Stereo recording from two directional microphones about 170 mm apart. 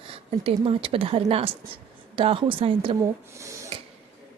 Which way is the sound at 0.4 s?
35° right (ahead or behind).